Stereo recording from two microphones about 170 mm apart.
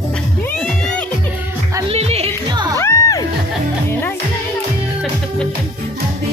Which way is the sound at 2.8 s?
20° left (ahead or behind).